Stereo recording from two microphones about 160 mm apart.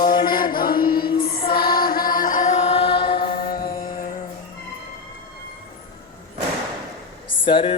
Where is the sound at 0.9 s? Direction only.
30° left (ahead or behind).